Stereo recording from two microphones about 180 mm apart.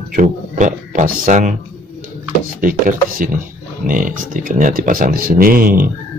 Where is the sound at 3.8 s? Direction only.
50° right (ahead or behind).